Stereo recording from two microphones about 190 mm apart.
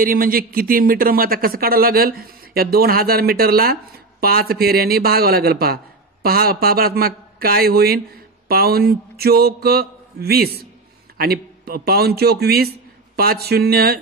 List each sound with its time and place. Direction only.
0.0 s a man's voice: 50° right (ahead or behind)